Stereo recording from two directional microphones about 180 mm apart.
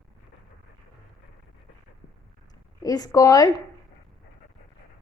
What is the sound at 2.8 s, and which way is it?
Speech, 20° left (ahead or behind).